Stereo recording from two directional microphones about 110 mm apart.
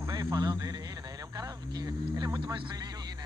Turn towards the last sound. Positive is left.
turn(degrees=-40)  # may be behind; listen again after turning